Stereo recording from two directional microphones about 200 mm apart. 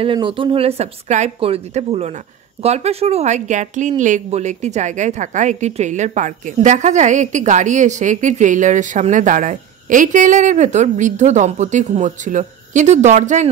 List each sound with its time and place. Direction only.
0.0 s a woman's voice: 25° right (ahead or behind)